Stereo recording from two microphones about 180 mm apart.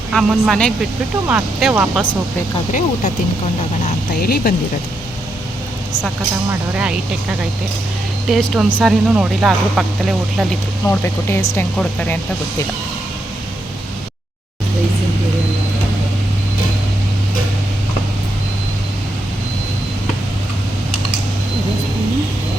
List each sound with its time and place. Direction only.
0.1 s speech: centre (ahead or behind)
4.2 s speech: 60° left (ahead or behind)
6.5 s speech: 5° right (ahead or behind)
10.8 s speech: 15° left (ahead or behind)